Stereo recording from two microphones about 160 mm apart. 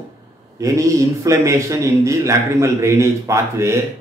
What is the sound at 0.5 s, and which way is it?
A man's voice, 20° right (ahead or behind).